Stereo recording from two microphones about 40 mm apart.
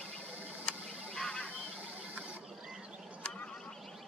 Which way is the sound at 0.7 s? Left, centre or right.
Left.